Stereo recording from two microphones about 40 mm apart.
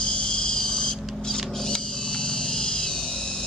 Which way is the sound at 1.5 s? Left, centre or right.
Centre.